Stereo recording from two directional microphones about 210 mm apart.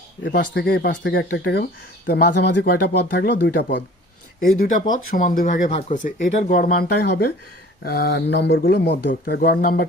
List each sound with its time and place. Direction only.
0.3 s speech: 45° left (ahead or behind)